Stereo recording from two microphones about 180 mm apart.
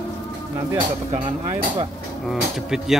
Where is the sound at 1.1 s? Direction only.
35° right (ahead or behind).